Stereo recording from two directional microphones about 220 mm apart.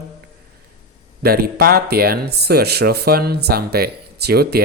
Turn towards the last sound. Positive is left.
turn(degrees=-45)  # may be behind; listen again after turning